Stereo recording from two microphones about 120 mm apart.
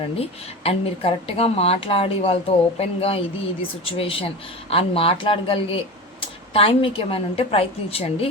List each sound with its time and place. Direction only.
0.2 s a woman's voice: 55° left (ahead or behind)